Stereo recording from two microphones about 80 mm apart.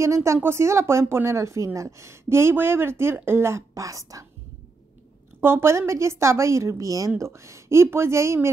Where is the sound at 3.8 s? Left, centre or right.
Right.